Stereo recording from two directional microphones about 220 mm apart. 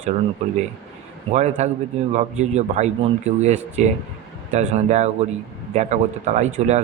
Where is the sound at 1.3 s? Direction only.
30° right (ahead or behind).